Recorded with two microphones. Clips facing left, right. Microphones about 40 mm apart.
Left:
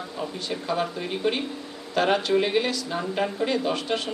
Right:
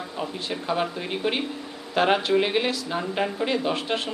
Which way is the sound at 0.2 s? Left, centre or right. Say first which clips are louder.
Right 1 dB; right.